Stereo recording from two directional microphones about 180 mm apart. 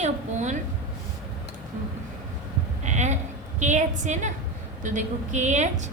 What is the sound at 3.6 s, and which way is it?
A woman's voice, 40° right (ahead or behind).